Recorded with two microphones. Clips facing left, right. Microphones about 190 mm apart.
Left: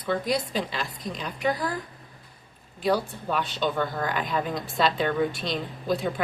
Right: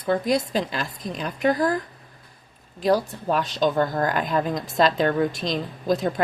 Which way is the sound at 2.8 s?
40° right (ahead or behind).